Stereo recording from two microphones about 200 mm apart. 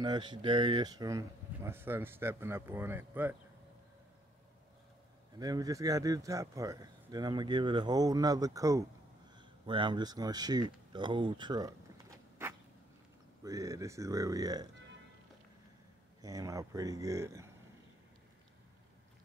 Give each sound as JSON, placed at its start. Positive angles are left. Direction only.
{"t": 0.0, "sound": "speech", "side_deg": -20}
{"t": 5.4, "sound": "speech", "side_deg": -20}
{"t": 12.4, "sound": "a sound", "side_deg": -10}
{"t": 13.4, "sound": "speech", "side_deg": -15}
{"t": 16.2, "sound": "speech", "side_deg": -15}